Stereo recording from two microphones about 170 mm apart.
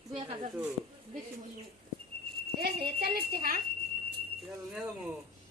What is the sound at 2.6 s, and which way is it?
Speech, 70° right (ahead or behind).